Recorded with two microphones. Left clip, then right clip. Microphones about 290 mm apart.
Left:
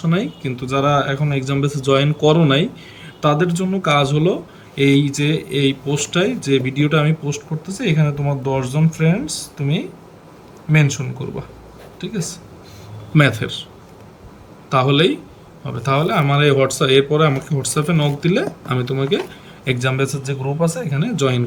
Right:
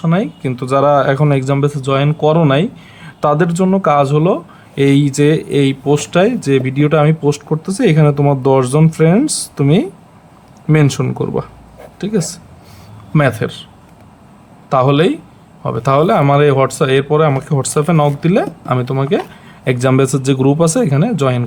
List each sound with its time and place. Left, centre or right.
0.0 s speech: centre
14.7 s speech: centre